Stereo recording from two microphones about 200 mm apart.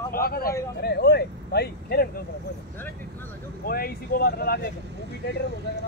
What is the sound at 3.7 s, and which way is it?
Speech, 50° left (ahead or behind).